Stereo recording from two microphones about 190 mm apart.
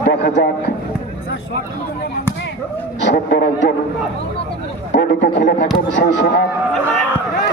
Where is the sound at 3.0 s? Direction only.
65° left (ahead or behind).